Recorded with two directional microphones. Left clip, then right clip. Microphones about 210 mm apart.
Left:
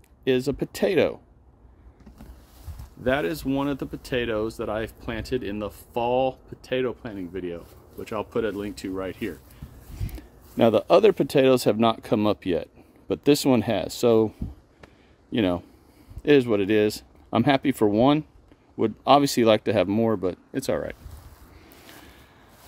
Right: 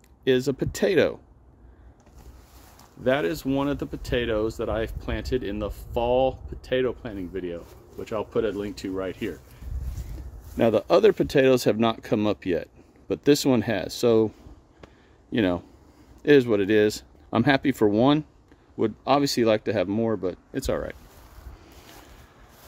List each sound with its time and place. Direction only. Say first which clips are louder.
0.2 s speech: right 1 dB; centre (ahead or behind)
3.0 s speech: right 1 dB; 5° left (ahead or behind)
10.6 s speech: left 1 dB; 5° left (ahead or behind)
15.3 s speech: even; centre (ahead or behind)